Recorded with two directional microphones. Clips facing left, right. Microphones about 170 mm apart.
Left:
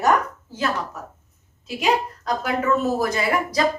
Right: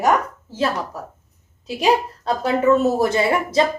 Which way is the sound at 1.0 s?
35° right (ahead or behind).